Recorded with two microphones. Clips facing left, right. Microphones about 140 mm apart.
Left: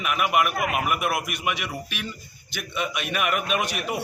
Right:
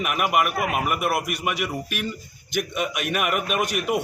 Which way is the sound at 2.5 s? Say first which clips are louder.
Right 4 dB; 50° right (ahead or behind).